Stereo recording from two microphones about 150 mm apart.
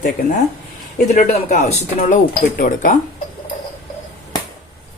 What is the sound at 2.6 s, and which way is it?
Speech, 65° left (ahead or behind).